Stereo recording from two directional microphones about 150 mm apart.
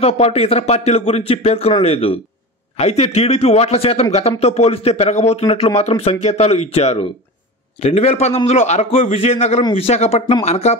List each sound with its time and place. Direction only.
0.0 s speech: 40° left (ahead or behind)